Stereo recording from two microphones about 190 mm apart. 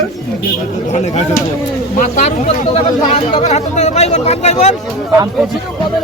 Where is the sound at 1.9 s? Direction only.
40° left (ahead or behind).